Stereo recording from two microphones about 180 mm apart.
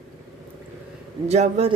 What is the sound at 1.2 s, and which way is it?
Speech, 35° right (ahead or behind).